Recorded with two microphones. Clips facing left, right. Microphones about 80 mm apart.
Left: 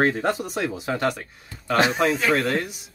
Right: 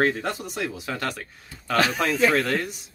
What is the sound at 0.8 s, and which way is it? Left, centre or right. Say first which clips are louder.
Speech: left 5 dB; left.